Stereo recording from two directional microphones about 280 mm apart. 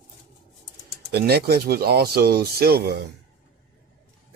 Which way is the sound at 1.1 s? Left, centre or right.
Right.